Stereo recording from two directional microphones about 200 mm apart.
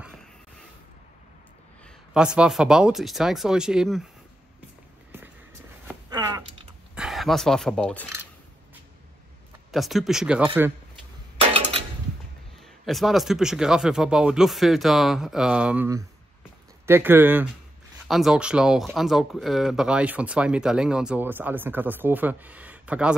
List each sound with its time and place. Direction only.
2.1 s speech: 5° right (ahead or behind)
6.0 s a sound: 20° right (ahead or behind)
7.0 s speech: centre (ahead or behind)
9.7 s speech: centre (ahead or behind)
11.3 s a sound: 30° right (ahead or behind)
12.8 s speech: centre (ahead or behind)